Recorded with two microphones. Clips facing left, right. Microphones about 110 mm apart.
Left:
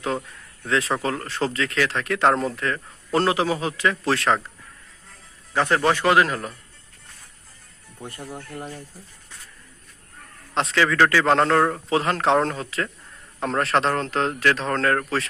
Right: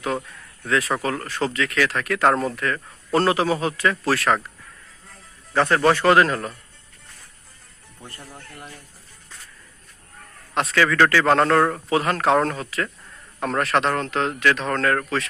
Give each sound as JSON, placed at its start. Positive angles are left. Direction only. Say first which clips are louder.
{"t": 0.6, "sound": "speech", "louder": "right 1 dB", "side_deg": 25}
{"t": 5.5, "sound": "a man's voice", "louder": "right 2 dB", "side_deg": 15}
{"t": 8.0, "sound": "speech", "louder": "left 6 dB", "side_deg": 20}
{"t": 10.5, "sound": "a man's voice", "louder": "right 1 dB", "side_deg": 25}